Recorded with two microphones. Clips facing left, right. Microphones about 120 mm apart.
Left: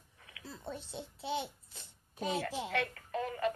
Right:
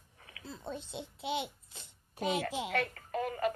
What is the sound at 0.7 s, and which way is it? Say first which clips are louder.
A child's voice: right 2 dB; 20° right (ahead or behind).